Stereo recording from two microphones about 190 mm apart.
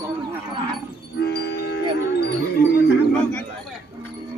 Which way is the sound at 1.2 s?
60° left (ahead or behind).